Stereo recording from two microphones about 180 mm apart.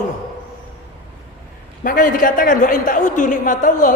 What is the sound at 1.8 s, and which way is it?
A woman's voice, 45° left (ahead or behind).